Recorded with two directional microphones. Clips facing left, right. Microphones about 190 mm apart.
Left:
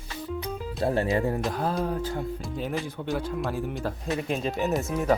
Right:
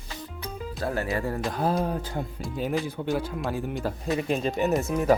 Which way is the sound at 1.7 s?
20° right (ahead or behind).